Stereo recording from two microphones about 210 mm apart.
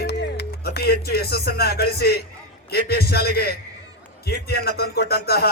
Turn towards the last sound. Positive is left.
turn(degrees=50)  # may be behind; listen again after turning